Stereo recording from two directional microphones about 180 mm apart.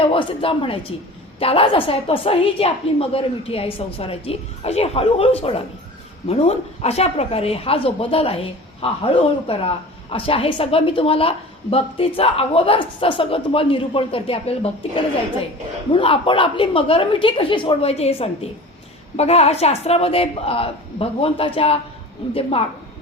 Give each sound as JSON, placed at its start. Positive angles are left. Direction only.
{"t": 0.0, "sound": "a woman's voice", "side_deg": 30}